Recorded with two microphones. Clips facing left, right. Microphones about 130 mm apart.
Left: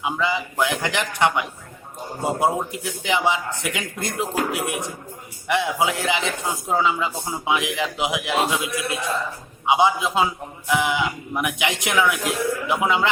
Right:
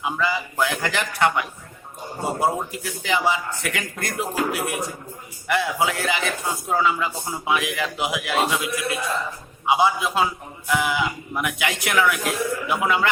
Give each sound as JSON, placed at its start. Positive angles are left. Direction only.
{"t": 0.0, "sound": "a man's voice", "side_deg": 20}
{"t": 2.7, "sound": "speech", "side_deg": 20}